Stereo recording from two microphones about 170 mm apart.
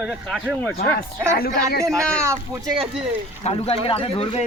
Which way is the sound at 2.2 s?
15° right (ahead or behind).